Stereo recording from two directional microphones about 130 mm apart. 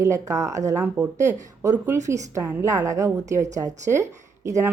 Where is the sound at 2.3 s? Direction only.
20° right (ahead or behind).